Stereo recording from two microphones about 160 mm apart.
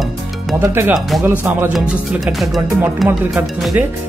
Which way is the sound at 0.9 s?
Centre (ahead or behind).